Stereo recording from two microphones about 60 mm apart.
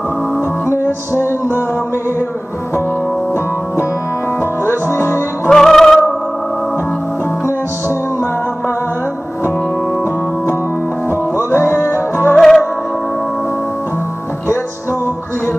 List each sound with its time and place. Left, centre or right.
1.1 s music: right
4.4 s music: left
5.5 s music: centre
10.0 s music: left
12.4 s music: centre